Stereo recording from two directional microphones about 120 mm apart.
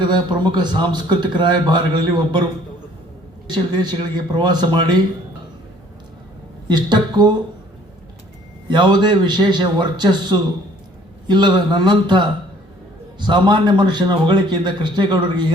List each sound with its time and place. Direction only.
0.0 s a man's voice: 40° right (ahead or behind)
3.5 s a man's voice: 40° right (ahead or behind)
6.7 s a man's voice: 40° right (ahead or behind)
8.6 s a man's voice: 40° right (ahead or behind)